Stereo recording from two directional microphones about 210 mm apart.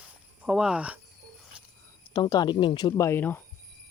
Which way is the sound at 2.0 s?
20° left (ahead or behind).